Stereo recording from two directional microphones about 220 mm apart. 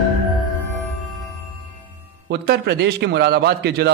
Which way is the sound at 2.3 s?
50° right (ahead or behind).